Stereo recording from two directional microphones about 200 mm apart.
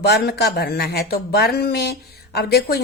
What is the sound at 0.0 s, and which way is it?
A woman's voice, 55° left (ahead or behind).